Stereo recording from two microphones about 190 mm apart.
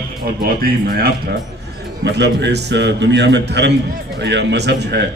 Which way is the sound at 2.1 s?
65° right (ahead or behind).